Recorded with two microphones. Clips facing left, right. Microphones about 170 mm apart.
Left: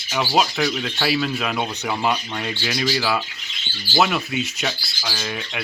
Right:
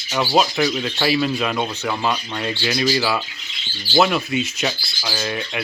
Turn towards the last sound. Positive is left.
turn(degrees=0)  # may be behind; listen again after turning